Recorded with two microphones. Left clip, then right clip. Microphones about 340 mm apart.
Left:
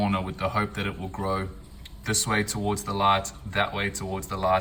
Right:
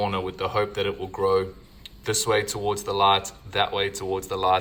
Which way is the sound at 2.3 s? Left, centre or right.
Centre.